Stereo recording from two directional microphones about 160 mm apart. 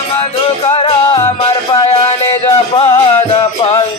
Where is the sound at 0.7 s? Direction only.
35° left (ahead or behind).